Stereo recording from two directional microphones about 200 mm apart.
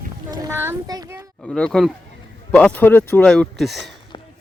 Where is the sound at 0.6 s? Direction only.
15° right (ahead or behind).